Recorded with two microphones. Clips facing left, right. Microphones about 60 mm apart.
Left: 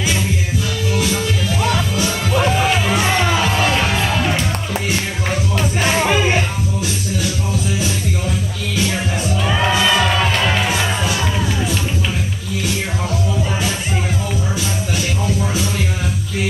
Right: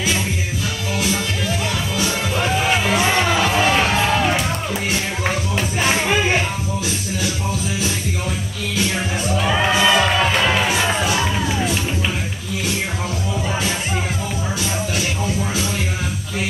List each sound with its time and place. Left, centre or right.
3.6 s music: centre
9.4 s music: centre